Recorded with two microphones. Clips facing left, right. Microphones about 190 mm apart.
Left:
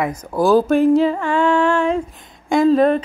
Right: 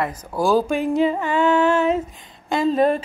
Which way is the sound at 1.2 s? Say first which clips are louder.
Left 2 dB; 5° right (ahead or behind).